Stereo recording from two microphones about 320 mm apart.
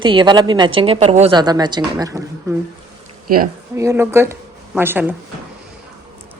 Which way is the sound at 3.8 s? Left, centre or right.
Centre.